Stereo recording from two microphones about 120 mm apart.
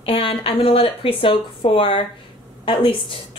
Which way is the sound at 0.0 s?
50° left (ahead or behind).